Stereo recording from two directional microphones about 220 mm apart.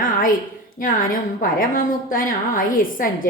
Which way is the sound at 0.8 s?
40° left (ahead or behind).